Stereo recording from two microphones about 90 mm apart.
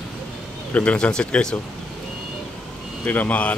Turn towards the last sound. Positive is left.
turn(degrees=15)  # may be behind; listen again after turning